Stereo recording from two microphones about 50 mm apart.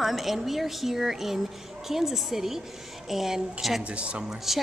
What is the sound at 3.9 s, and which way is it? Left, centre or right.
Speech, right.